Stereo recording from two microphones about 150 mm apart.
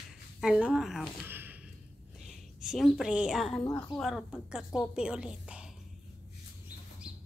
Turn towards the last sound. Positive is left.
turn(degrees=-5)  # may be behind; listen again after turning